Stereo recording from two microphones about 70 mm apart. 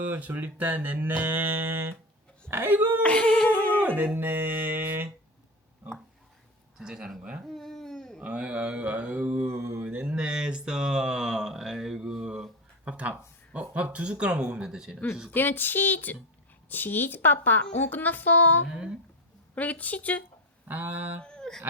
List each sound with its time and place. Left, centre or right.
0.2 s speech: right
3.0 s humming: centre
3.5 s humming: left
3.8 s speech: right
6.7 s speech: centre
7.4 s a sound: centre
8.2 s speech: centre
9.4 s mantra: right
9.7 s a sound: centre
15.3 s a woman's voice: left
20.7 s speech: right
21.2 s a sound: centre